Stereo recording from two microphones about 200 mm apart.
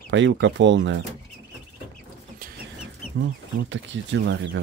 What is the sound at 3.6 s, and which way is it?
Speech, 65° right (ahead or behind).